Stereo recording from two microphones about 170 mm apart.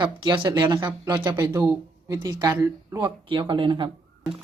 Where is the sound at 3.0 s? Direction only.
30° right (ahead or behind).